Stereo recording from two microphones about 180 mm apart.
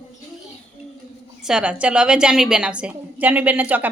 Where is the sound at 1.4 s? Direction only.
5° right (ahead or behind).